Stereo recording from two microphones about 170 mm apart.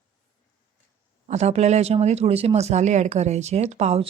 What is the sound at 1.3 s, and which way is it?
Speech, 40° right (ahead or behind).